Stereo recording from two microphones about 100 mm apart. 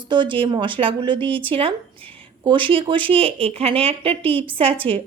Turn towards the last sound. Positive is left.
turn(degrees=-70)  # may be behind; listen again after turning